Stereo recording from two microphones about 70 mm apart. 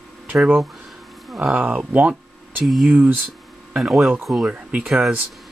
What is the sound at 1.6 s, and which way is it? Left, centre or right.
Speech, right.